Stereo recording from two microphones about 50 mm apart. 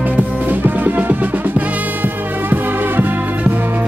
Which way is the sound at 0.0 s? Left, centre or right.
Right.